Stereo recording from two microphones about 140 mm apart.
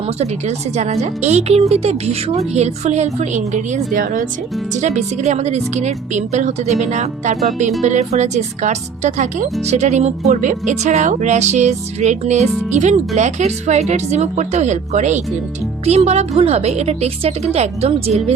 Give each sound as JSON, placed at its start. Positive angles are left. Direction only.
{"t": 0.2, "sound": "speech", "side_deg": -50}
{"t": 4.7, "sound": "speech", "side_deg": -55}